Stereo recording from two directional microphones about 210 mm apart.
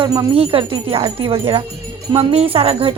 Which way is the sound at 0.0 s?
20° right (ahead or behind).